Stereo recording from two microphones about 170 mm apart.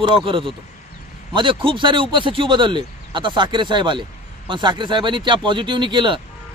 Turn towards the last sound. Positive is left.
turn(degrees=-30)  # may be behind; listen again after turning